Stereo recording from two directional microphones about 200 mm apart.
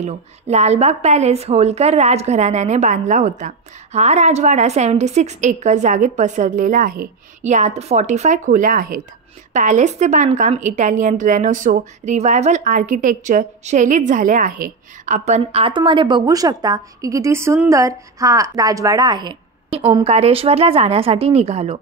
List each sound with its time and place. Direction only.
0.0 s a woman's voice: 35° right (ahead or behind)